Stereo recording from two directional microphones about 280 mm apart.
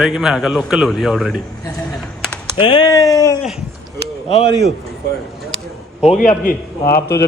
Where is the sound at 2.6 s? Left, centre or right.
Centre.